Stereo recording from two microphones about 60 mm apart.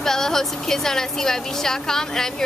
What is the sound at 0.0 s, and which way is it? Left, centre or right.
Speech, centre.